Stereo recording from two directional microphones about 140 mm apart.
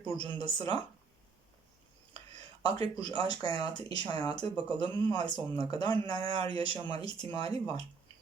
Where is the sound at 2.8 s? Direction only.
30° left (ahead or behind).